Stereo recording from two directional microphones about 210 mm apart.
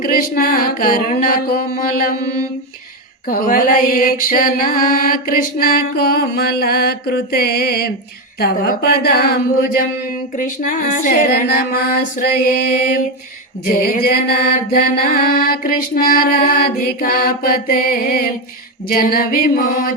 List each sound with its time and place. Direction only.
0.0 s mantra: 45° left (ahead or behind)
3.2 s mantra: 40° left (ahead or behind)